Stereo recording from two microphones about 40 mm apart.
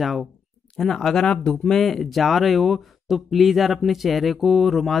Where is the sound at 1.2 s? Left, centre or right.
Left.